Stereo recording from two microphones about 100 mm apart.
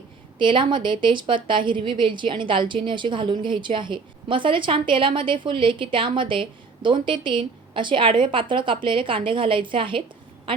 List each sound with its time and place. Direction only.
0.3 s a woman's voice: 55° right (ahead or behind)